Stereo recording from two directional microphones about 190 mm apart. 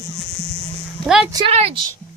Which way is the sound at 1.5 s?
35° right (ahead or behind).